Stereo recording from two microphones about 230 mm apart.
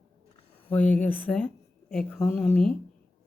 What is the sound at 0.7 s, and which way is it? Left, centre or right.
A woman's voice, centre.